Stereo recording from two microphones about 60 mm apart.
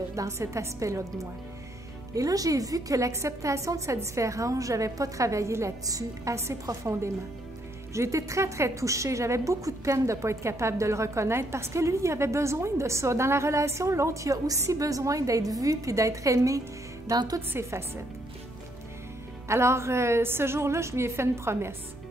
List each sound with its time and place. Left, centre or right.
0.1 s a woman's voice: right
2.1 s a woman's voice: right
5.9 s a woman's voice: right
6.3 s a woman's voice: right
17.5 s a woman's voice: right
19.4 s a woman's voice: right